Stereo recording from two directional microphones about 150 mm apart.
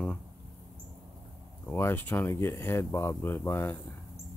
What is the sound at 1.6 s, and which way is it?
Speech, 15° left (ahead or behind).